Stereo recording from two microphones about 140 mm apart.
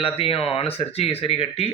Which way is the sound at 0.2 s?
40° left (ahead or behind).